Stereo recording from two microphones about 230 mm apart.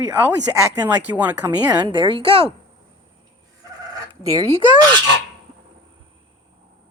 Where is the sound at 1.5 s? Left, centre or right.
Centre.